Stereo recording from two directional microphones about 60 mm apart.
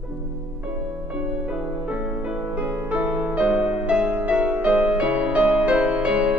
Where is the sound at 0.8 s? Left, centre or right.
Centre.